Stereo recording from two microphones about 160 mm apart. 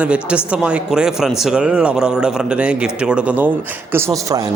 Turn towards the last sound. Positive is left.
turn(degrees=-20)  # may be behind; listen again after turning